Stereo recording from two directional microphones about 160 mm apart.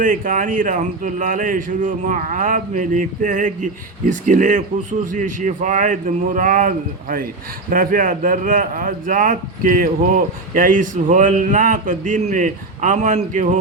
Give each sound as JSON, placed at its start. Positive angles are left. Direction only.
{"t": 0.0, "sound": "speech", "side_deg": -55}